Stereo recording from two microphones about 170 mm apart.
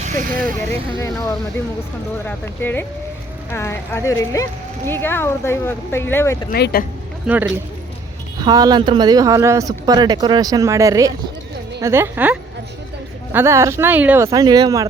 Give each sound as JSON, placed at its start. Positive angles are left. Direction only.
{"t": 0.0, "sound": "vehicle", "side_deg": -55}
{"t": 0.9, "sound": "speech", "side_deg": 20}
{"t": 6.5, "sound": "speech", "side_deg": 65}
{"t": 7.3, "sound": "speech", "side_deg": -10}
{"t": 8.4, "sound": "speech", "side_deg": -20}
{"t": 14.3, "sound": "speech", "side_deg": -25}